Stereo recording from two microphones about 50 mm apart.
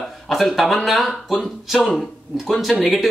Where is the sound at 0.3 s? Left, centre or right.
Centre.